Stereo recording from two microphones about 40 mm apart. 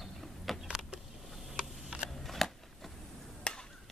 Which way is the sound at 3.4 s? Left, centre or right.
Centre.